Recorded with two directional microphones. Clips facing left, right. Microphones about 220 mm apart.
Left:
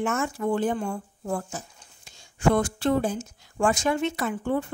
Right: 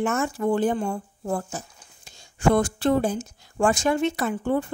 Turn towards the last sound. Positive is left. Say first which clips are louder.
# right 2 dB
turn(degrees=-35)  # may be behind; listen again after turning